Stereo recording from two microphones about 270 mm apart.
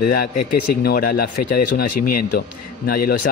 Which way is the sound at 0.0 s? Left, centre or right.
Left.